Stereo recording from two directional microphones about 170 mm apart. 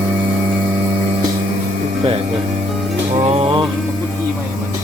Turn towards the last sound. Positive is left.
turn(degrees=-35)  # may be behind; listen again after turning